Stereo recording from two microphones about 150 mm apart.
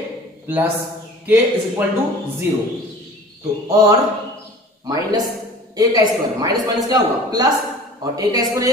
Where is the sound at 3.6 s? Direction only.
25° right (ahead or behind).